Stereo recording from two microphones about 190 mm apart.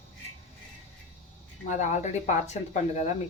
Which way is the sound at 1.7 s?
40° left (ahead or behind).